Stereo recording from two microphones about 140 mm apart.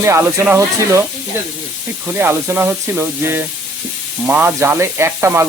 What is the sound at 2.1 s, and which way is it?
Speech, 15° right (ahead or behind).